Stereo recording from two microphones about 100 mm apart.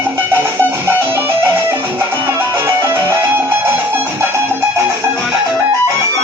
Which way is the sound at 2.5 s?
25° right (ahead or behind).